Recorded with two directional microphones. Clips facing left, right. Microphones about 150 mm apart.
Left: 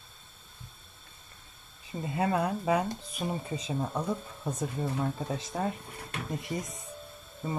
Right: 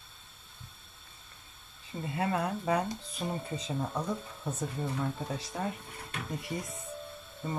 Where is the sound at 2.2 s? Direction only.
35° left (ahead or behind).